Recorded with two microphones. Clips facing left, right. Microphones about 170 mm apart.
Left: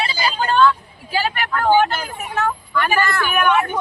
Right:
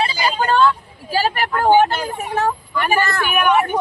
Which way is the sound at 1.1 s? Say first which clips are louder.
Right 3 dB; 40° right (ahead or behind).